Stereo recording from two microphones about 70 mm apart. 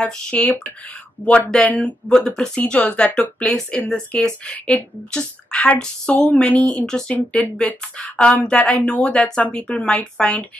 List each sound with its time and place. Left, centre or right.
0.0 s speech: centre
1.2 s speech: left
1.7 s speech: centre